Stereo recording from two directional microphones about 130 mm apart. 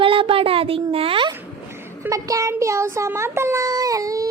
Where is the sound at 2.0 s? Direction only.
25° right (ahead or behind).